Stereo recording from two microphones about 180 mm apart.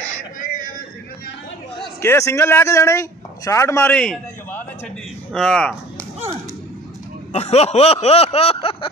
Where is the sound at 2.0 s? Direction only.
15° left (ahead or behind).